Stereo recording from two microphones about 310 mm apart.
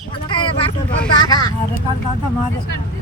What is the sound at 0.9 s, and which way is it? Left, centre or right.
Speech, centre.